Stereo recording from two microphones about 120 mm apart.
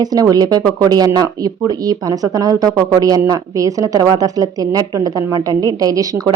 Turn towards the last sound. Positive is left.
turn(degrees=-30)  # may be behind; listen again after turning